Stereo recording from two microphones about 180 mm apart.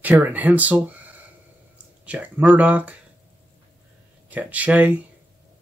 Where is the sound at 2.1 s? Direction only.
10° right (ahead or behind).